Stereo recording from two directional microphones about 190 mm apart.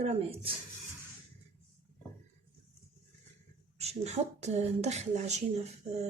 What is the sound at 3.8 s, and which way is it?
Speech, 35° right (ahead or behind).